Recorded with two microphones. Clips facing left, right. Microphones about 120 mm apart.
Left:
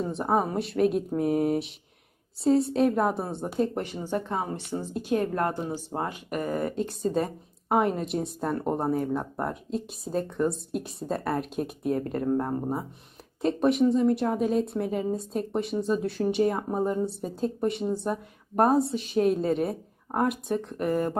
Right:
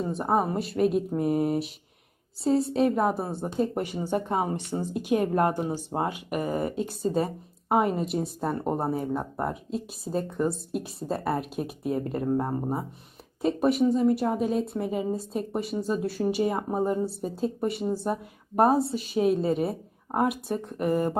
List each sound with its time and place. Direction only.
0.0 s a woman's voice: centre (ahead or behind)